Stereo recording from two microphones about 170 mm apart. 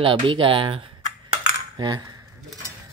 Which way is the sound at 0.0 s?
30° right (ahead or behind).